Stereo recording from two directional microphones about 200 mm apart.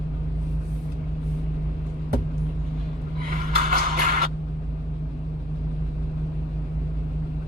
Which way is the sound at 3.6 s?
45° right (ahead or behind).